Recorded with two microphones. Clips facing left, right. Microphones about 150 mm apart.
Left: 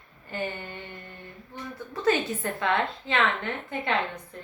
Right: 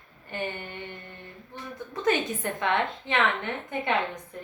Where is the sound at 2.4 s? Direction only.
20° right (ahead or behind).